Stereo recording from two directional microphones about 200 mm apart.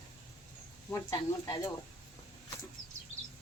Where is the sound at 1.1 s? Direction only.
15° left (ahead or behind).